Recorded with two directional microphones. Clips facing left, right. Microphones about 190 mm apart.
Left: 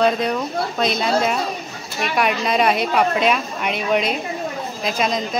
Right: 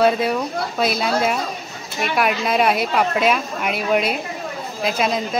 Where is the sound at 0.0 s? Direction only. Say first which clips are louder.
Right 1 dB; 5° right (ahead or behind).